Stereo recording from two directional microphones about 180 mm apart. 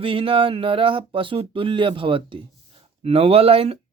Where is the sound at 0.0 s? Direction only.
30° right (ahead or behind).